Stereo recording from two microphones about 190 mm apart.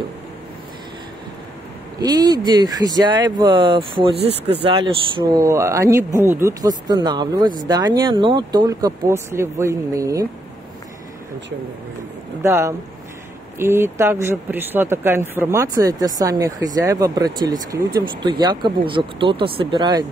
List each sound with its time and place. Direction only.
2.0 s speech: 20° right (ahead or behind)
12.4 s speech: 15° right (ahead or behind)